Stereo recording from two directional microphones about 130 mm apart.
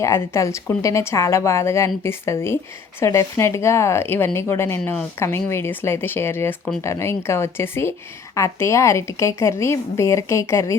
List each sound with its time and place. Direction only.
0.0 s speech: 25° left (ahead or behind)